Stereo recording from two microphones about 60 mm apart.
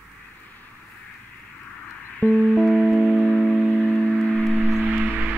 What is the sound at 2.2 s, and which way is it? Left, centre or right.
Music, left.